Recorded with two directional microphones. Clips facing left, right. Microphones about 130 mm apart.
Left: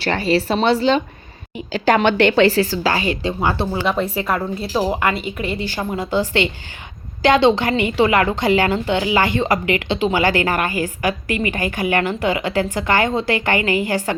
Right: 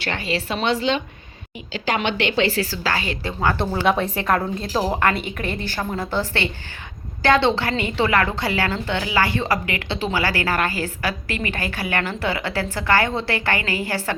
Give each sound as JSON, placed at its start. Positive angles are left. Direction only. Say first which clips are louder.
{"t": 0.0, "sound": "a woman's voice", "louder": "left 7 dB", "side_deg": 35}
{"t": 2.6, "sound": "a woman's voice", "louder": "left 5 dB", "side_deg": 20}
{"t": 3.8, "sound": "a woman's voice", "louder": "right 2 dB", "side_deg": 5}